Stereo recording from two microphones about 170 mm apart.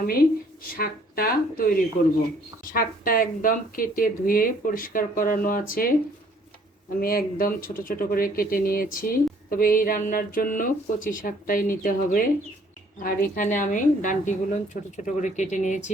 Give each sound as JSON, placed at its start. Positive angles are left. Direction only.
{"t": 0.1, "sound": "speech", "side_deg": 60}
{"t": 2.7, "sound": "speech", "side_deg": 55}
{"t": 7.0, "sound": "a woman's voice", "side_deg": 60}